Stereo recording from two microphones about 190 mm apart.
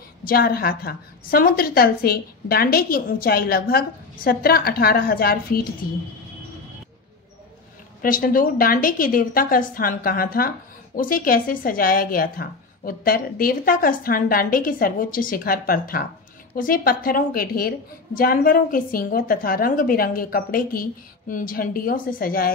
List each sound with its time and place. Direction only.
0.3 s a woman's voice: 55° left (ahead or behind)
8.0 s a woman's voice: 45° left (ahead or behind)